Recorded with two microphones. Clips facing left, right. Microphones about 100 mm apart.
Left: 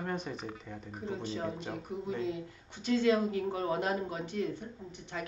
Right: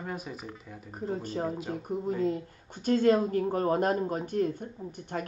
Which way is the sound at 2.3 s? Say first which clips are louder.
Right 6 dB; 45° right (ahead or behind).